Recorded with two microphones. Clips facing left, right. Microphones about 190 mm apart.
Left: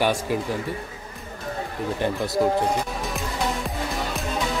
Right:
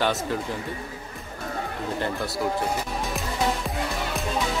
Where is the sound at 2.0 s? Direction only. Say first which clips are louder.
Left 7 dB; 20° left (ahead or behind).